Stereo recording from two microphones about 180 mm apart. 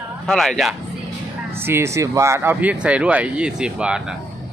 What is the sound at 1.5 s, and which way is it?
Speech, 10° right (ahead or behind).